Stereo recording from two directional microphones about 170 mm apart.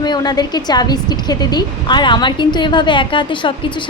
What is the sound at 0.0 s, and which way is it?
Speech, 25° left (ahead or behind).